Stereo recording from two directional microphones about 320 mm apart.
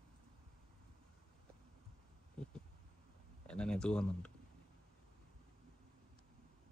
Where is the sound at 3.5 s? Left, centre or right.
Centre.